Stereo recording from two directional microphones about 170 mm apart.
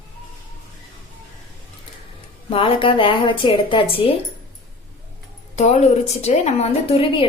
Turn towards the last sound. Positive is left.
turn(degrees=35)  # may be behind; listen again after turning